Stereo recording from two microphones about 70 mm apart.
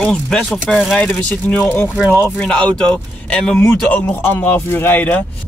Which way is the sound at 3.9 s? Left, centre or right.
Left.